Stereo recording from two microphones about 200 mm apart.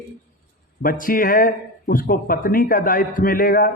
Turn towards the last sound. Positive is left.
turn(degrees=45)  # may be behind; listen again after turning